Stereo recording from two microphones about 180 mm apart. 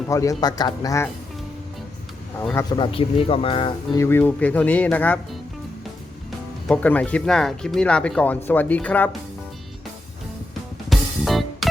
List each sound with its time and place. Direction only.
0.1 s speech: 15° left (ahead or behind)
2.6 s speech: 25° left (ahead or behind)
3.9 s speech: 15° left (ahead or behind)
6.7 s speech: 10° left (ahead or behind)
10.8 s music: centre (ahead or behind)